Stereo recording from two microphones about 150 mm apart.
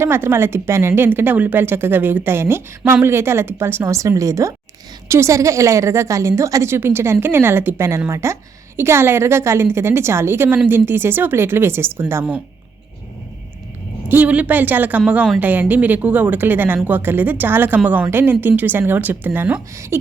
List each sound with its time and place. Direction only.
0.0 s a woman's voice: 15° right (ahead or behind)
14.1 s a woman's voice: 10° right (ahead or behind)